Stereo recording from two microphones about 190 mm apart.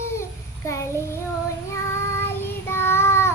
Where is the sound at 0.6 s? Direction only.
15° left (ahead or behind).